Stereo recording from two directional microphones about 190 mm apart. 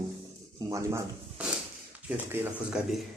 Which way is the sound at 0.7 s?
15° right (ahead or behind).